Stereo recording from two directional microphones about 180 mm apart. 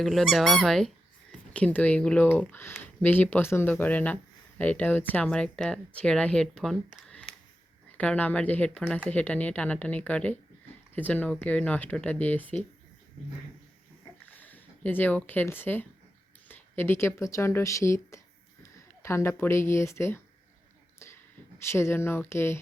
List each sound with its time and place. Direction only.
0.0 s speech: centre (ahead or behind)
14.3 s speech: 10° left (ahead or behind)
21.7 s speech: 15° left (ahead or behind)